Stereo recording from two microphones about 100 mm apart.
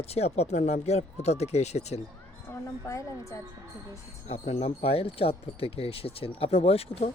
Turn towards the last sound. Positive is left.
turn(degrees=80)